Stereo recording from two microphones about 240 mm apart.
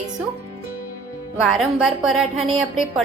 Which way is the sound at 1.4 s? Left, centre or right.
Centre.